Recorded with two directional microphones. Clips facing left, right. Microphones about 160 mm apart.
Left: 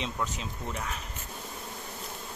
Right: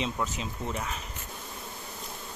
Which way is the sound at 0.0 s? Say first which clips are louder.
Right 2 dB; centre (ahead or behind).